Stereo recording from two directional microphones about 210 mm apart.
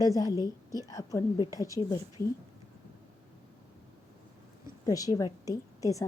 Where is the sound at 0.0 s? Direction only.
15° left (ahead or behind).